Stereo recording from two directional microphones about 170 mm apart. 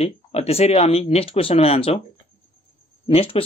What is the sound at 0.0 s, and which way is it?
Speech, 35° left (ahead or behind).